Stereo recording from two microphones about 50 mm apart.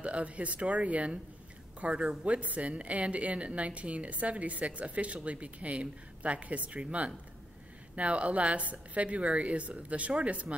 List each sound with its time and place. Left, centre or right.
0.0 s speech: right